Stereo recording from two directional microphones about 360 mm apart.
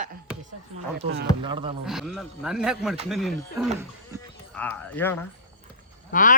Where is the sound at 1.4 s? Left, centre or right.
Centre.